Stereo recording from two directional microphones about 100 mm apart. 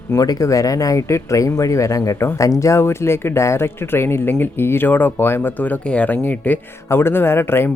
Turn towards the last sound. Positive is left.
turn(degrees=20)  # may be behind; listen again after turning